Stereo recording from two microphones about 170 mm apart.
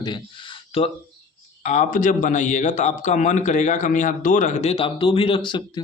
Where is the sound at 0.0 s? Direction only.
25° left (ahead or behind).